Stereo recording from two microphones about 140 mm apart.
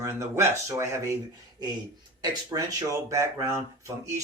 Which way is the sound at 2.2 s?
30° right (ahead or behind).